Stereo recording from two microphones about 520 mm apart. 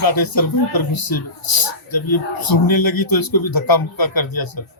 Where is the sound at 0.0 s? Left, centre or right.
Left.